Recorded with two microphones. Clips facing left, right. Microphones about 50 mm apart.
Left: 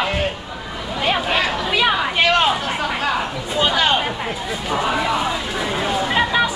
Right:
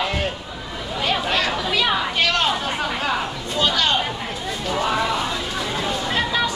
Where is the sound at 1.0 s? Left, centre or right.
Centre.